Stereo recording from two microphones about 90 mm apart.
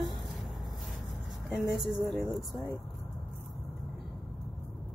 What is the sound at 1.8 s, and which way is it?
Speech, 5° right (ahead or behind).